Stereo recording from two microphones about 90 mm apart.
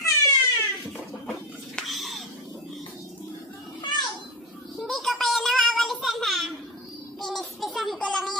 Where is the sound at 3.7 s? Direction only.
55° left (ahead or behind).